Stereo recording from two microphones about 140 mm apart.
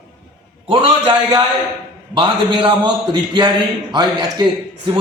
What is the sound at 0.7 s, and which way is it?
A man's voice, 35° right (ahead or behind).